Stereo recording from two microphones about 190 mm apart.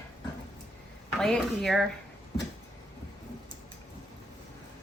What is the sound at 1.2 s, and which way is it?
Speech, centre (ahead or behind).